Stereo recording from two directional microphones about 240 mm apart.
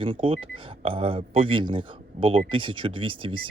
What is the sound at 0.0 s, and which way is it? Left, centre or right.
Speech, right.